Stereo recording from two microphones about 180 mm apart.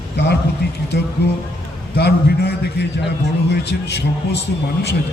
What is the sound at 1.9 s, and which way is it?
A man's voice, 65° left (ahead or behind).